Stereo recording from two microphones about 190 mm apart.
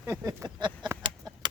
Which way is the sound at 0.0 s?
15° right (ahead or behind).